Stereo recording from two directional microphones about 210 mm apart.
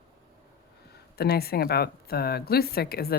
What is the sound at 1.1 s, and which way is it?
A woman's voice, 50° left (ahead or behind).